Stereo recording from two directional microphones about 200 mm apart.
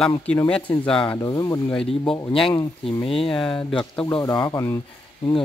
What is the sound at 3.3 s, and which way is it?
Speech, 5° left (ahead or behind).